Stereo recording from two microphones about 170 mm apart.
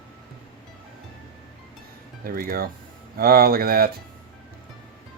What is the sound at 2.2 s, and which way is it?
Speech, 60° right (ahead or behind).